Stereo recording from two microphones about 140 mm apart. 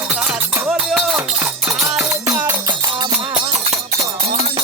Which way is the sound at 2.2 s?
25° right (ahead or behind).